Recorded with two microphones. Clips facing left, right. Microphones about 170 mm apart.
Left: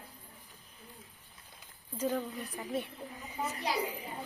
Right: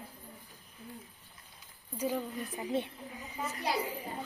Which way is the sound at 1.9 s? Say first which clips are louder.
Left 1 dB; 10° right (ahead or behind).